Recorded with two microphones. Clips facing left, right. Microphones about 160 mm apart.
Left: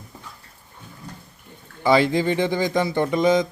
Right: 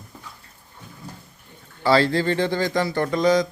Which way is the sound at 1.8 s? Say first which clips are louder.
Left 1 dB; 15° left (ahead or behind).